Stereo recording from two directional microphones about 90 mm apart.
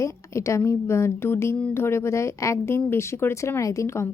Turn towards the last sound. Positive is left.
turn(degrees=30)  # may be behind; listen again after turning